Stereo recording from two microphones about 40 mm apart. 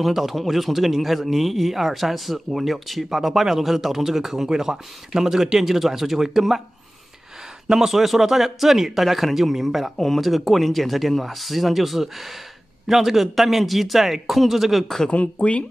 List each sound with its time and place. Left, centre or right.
0.0 s a man's voice: centre
7.6 s a man's voice: centre
15.0 s speech: left